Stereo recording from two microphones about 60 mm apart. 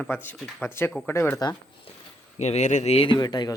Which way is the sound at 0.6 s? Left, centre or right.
Left.